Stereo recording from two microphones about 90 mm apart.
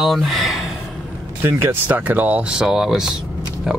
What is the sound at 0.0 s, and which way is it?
Speech, centre (ahead or behind).